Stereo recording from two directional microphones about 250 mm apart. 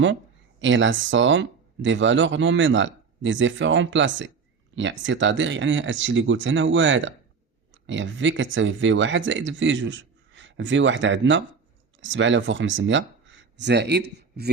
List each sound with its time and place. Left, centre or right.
0.6 s speech: right